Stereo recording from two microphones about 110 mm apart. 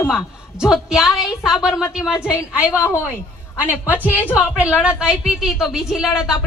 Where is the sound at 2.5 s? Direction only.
10° right (ahead or behind).